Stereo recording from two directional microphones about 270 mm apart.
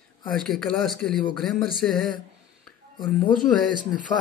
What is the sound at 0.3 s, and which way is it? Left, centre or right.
Speech, centre.